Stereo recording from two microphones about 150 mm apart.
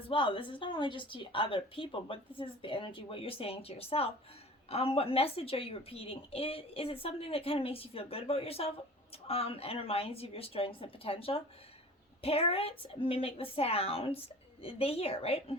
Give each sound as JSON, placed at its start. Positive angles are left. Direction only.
{"t": 0.1, "sound": "speech", "side_deg": 35}